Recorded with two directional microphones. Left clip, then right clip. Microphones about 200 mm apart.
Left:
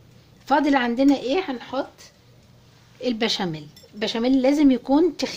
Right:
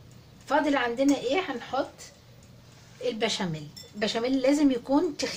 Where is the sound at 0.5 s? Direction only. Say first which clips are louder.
Left 5 dB; 45° left (ahead or behind).